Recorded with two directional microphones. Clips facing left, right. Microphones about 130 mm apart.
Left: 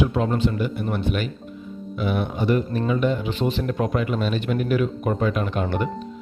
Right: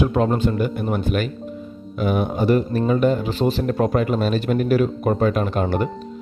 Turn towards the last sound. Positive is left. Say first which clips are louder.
# right 3 dB
turn(degrees=-40)  # may be behind; listen again after turning